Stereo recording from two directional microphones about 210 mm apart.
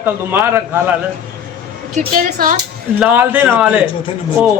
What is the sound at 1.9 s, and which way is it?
Speech, 40° right (ahead or behind).